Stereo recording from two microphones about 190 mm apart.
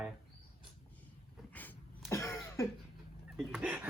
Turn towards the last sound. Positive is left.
turn(degrees=-5)  # may be behind; listen again after turning